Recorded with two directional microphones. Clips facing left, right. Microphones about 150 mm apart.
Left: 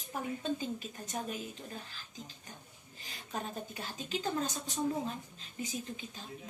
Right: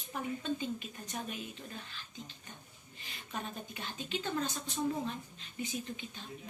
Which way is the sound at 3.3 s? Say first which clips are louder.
Left 2 dB; 40° left (ahead or behind).